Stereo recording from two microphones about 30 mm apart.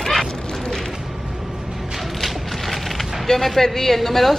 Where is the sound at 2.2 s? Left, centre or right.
Centre.